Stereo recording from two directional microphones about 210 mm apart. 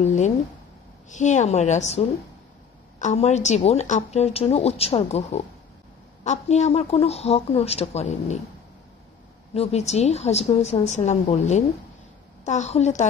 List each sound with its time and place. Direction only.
0.0 s a woman's voice: 35° left (ahead or behind)
9.5 s a woman's voice: 30° left (ahead or behind)